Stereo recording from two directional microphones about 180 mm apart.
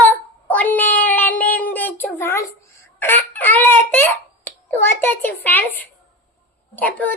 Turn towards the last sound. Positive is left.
turn(degrees=10)  # may be behind; listen again after turning